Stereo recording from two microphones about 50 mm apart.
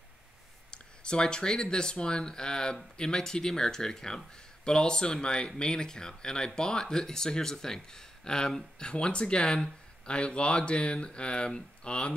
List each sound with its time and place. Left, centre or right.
0.7 s speech: centre